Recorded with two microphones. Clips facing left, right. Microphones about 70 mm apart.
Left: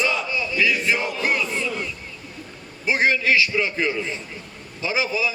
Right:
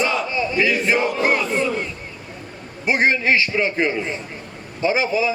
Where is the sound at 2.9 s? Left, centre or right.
Right.